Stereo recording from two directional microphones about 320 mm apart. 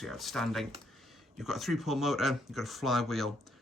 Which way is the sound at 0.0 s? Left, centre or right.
Centre.